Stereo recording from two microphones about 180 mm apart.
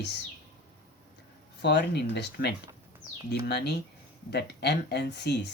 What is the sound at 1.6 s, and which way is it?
Speech, 70° left (ahead or behind).